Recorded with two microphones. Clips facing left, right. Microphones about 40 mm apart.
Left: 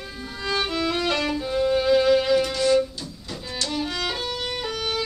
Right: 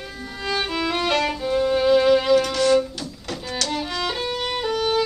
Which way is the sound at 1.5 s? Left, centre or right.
Centre.